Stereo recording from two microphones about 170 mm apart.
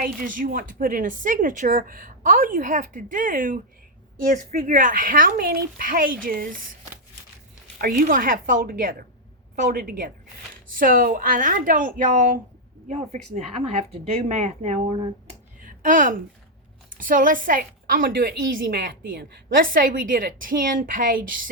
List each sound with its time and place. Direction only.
0.0 s speech: 55° right (ahead or behind)
7.8 s a woman's voice: 60° right (ahead or behind); by 14.8 s 40° right (ahead or behind)
15.6 s a sound: 50° right (ahead or behind)
16.9 s a woman's voice: 50° right (ahead or behind)